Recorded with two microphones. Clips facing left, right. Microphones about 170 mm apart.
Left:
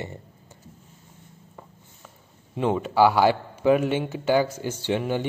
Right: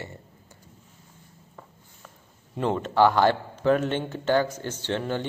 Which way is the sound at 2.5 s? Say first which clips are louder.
Left 2 dB; 5° left (ahead or behind).